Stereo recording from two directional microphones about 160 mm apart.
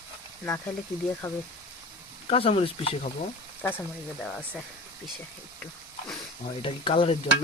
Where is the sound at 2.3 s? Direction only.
35° left (ahead or behind).